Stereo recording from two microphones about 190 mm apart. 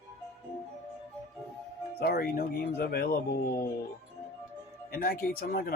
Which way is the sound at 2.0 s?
55° left (ahead or behind).